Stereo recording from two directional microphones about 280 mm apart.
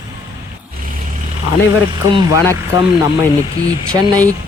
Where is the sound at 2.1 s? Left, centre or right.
Centre.